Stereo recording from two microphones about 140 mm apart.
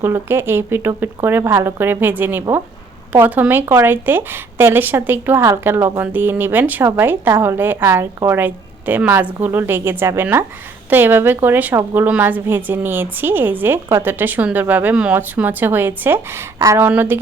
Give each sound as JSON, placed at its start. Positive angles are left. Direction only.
{"t": 0.0, "sound": "a woman's voice", "side_deg": -15}